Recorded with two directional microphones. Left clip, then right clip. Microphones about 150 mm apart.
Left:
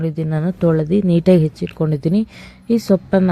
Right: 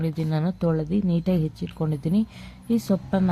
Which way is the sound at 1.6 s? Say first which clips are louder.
Left 9 dB; 20° left (ahead or behind).